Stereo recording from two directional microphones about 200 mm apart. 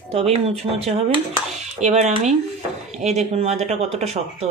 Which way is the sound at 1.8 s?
35° right (ahead or behind).